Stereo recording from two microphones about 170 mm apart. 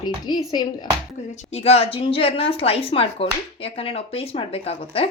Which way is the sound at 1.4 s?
40° left (ahead or behind).